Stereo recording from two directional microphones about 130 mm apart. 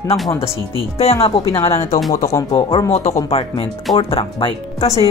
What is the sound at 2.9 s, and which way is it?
Speech, 60° left (ahead or behind).